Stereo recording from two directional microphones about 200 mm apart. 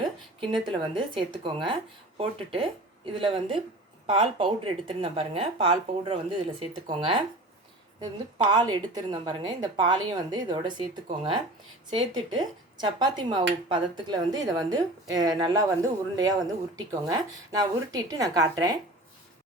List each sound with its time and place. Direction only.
0.0 s speech: 25° right (ahead or behind)